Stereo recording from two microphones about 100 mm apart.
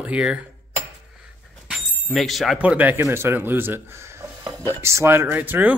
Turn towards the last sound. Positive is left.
turn(degrees=-20)  # may be behind; listen again after turning